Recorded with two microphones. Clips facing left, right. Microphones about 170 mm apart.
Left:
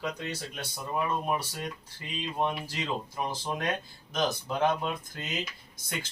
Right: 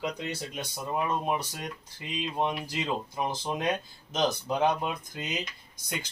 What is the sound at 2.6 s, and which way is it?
Speech, 15° right (ahead or behind).